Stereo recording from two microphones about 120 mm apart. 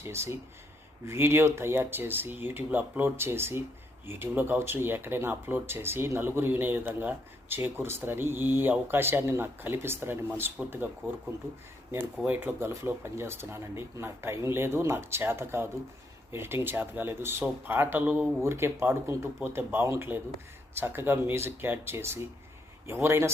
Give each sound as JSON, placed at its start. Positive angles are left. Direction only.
{"t": 0.0, "sound": "speech", "side_deg": -20}
{"t": 11.9, "sound": "speech", "side_deg": -15}